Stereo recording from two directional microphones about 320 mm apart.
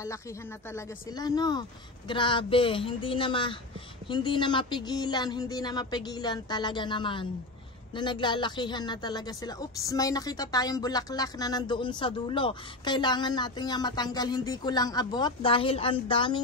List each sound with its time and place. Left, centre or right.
0.7 s speech: centre